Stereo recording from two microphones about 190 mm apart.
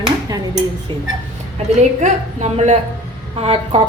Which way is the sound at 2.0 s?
35° right (ahead or behind).